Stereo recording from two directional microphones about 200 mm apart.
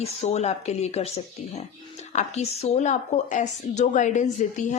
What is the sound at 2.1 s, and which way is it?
A woman's voice, 35° left (ahead or behind).